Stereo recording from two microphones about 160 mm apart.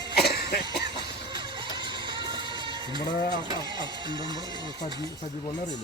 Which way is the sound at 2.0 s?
30° right (ahead or behind).